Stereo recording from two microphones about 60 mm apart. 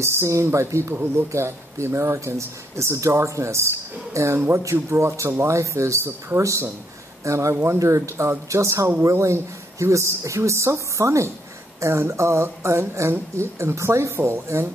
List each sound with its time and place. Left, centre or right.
0.0 s speech: right
7.5 s speech: right
7.8 s speech: right